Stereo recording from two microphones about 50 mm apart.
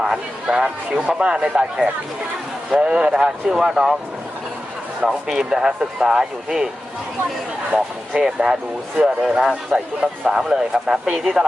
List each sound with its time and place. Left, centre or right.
0.0 s speech: centre
5.0 s speech: centre
8.2 s speech: centre